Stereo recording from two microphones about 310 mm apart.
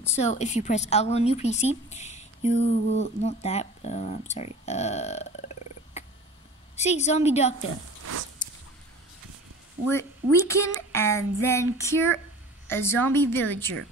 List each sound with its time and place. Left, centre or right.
0.1 s a woman's voice: left
8.0 s a sound: right
9.8 s speech: centre